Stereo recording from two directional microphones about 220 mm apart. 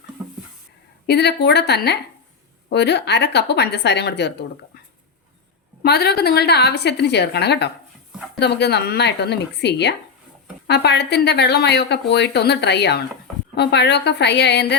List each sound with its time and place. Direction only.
1.0 s a woman's voice: 50° left (ahead or behind)
5.8 s a woman's voice: 45° left (ahead or behind)